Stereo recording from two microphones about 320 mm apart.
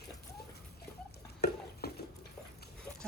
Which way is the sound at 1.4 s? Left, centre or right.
Left.